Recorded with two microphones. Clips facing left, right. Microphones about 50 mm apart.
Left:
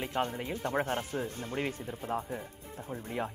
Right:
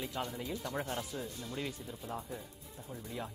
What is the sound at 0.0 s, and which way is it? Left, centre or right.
A man's voice, left.